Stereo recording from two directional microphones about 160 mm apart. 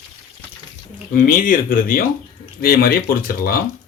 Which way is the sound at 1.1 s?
60° left (ahead or behind).